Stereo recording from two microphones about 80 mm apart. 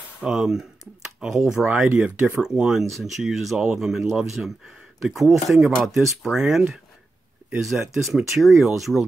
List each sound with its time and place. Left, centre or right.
0.2 s speech: centre
1.9 s speech: right
2.3 s speech: centre
7.9 s speech: centre